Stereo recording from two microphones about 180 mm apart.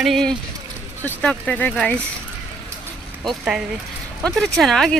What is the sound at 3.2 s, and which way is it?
Speech, 5° right (ahead or behind).